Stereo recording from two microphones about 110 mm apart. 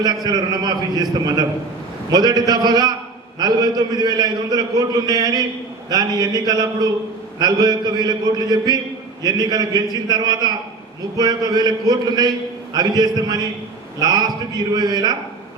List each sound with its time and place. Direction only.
0.0 s a man's voice: 35° right (ahead or behind)
2.0 s a man's voice: 40° right (ahead or behind)